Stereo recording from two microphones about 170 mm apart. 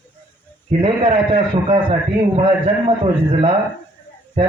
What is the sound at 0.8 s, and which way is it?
A man's voice, 35° right (ahead or behind).